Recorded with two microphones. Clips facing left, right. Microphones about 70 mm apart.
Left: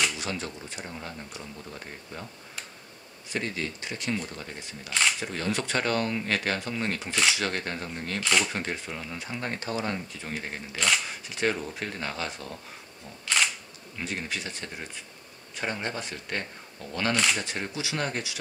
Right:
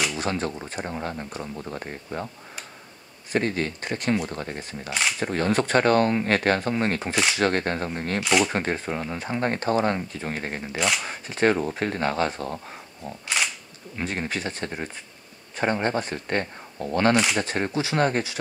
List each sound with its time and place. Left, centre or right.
0.2 s speech: right
3.3 s speech: right
8.2 s speech: centre
8.5 s speech: right
13.9 s speech: right